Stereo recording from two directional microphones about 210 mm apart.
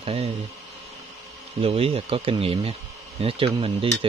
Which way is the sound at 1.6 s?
25° right (ahead or behind).